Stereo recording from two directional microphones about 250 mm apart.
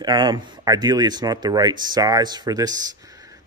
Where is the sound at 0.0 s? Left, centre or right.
Centre.